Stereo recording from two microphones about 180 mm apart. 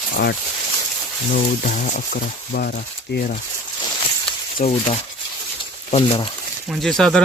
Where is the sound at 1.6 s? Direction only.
50° left (ahead or behind).